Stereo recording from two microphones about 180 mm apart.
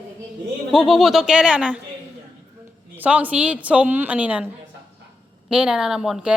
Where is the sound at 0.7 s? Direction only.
Centre (ahead or behind).